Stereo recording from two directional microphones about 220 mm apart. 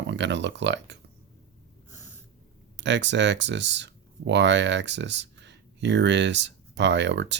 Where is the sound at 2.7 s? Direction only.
55° right (ahead or behind).